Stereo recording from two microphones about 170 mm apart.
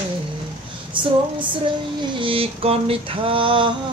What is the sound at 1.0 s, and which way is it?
Female singing, 30° right (ahead or behind).